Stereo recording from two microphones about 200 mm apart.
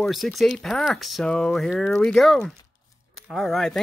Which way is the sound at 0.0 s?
Centre (ahead or behind).